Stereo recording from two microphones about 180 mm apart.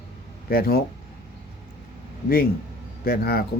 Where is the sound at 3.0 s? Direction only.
55° left (ahead or behind).